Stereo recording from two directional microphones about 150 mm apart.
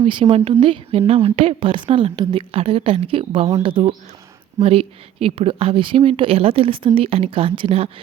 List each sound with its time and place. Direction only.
0.0 s a woman's voice: 35° right (ahead or behind)